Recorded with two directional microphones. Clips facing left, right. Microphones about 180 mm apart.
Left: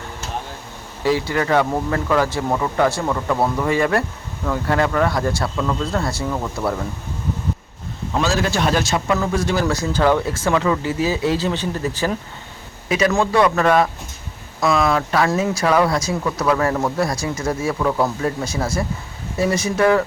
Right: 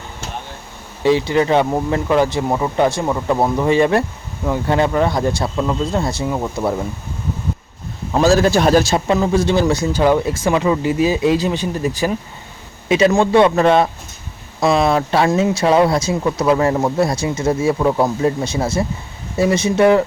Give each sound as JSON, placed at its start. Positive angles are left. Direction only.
{"t": 1.0, "sound": "speech", "side_deg": -20}
{"t": 8.1, "sound": "a man's voice", "side_deg": -40}
{"t": 12.9, "sound": "speech", "side_deg": -25}